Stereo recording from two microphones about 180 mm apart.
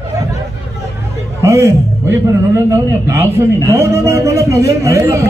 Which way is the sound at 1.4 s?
15° right (ahead or behind).